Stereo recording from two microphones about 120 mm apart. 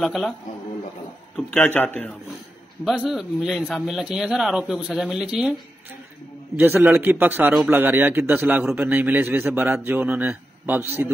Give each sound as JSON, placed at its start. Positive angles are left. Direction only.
{"t": 0.0, "sound": "speech", "side_deg": 0}
{"t": 1.3, "sound": "a man's voice", "side_deg": 10}
{"t": 2.8, "sound": "speech", "side_deg": 0}
{"t": 6.5, "sound": "a man's voice", "side_deg": -15}